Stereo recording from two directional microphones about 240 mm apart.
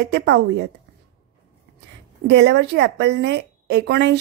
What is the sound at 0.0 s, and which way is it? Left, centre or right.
Speech, right.